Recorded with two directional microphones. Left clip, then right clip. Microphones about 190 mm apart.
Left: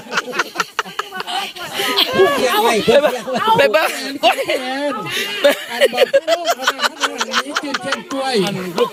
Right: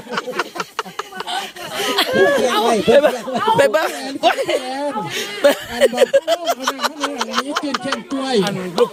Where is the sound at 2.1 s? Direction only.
35° right (ahead or behind).